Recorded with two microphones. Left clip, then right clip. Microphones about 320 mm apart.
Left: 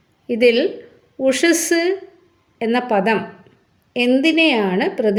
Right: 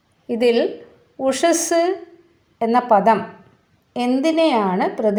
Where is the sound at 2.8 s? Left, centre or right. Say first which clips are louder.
Right 4 dB; right.